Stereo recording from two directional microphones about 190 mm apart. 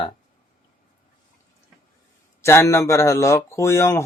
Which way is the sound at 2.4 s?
15° left (ahead or behind).